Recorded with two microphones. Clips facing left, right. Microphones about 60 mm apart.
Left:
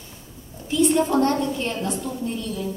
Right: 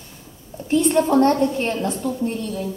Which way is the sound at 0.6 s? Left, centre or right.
Right.